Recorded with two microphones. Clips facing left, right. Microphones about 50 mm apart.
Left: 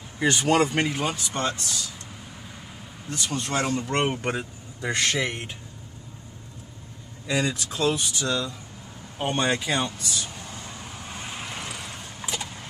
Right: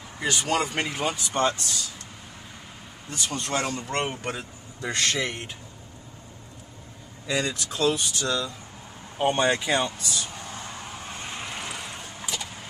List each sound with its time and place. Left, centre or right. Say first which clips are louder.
0.2 s speech: left 4 dB; left
0.5 s speech: left 5 dB; centre
0.9 s speech: right 1 dB; centre
3.1 s speech: left 1 dB; centre
3.3 s speech: left 3 dB; centre
7.2 s speech: left 1 dB; centre
9.2 s speech: right 2 dB; centre
10.7 s vehicle: right 1 dB; centre